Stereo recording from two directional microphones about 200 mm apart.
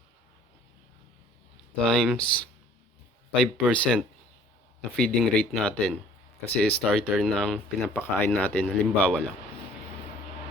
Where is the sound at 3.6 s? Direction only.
Centre (ahead or behind).